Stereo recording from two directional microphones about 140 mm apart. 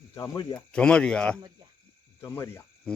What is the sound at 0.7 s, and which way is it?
Speech, 5° left (ahead or behind).